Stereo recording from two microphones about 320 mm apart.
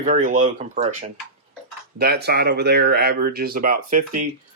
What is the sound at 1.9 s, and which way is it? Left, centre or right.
Speech, right.